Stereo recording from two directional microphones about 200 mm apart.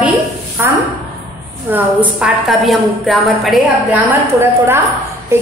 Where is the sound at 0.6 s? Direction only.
10° right (ahead or behind).